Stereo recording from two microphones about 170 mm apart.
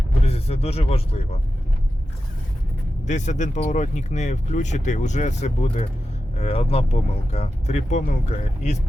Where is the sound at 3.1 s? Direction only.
45° left (ahead or behind).